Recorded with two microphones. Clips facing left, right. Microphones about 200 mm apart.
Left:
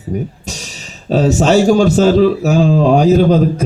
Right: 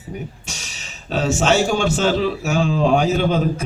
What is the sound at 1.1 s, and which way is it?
Speech, 35° left (ahead or behind).